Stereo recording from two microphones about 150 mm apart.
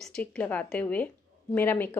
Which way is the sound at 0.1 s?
10° left (ahead or behind).